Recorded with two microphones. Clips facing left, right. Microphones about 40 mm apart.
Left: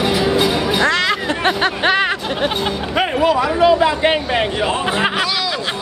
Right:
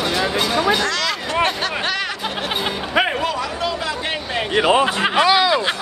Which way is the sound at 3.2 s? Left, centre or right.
Centre.